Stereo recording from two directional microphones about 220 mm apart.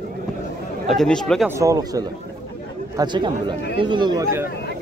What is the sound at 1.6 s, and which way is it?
Speech, 15° right (ahead or behind).